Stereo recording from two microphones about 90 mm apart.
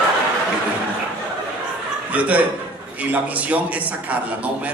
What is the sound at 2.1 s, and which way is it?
A man's voice, 15° right (ahead or behind).